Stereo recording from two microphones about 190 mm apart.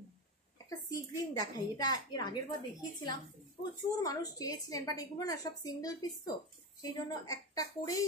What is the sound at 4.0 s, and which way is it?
A woman's voice, 20° left (ahead or behind).